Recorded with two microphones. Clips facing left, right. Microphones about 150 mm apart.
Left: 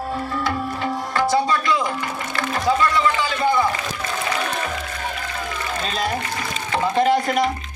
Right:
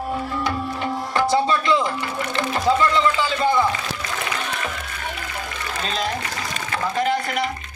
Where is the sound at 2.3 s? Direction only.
20° right (ahead or behind).